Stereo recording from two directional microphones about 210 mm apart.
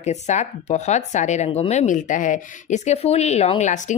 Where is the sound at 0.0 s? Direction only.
35° left (ahead or behind).